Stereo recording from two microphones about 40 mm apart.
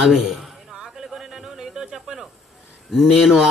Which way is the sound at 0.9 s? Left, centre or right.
Centre.